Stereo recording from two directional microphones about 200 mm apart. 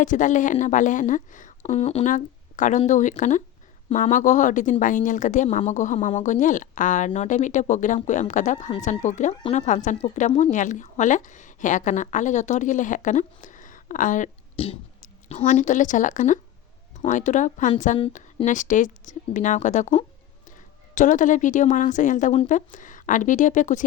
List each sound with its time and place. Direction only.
0.0 s speech: 40° left (ahead or behind)
1.6 s speech: 30° left (ahead or behind)